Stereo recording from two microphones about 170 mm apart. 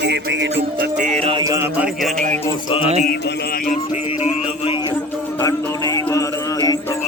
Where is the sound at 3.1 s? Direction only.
70° left (ahead or behind).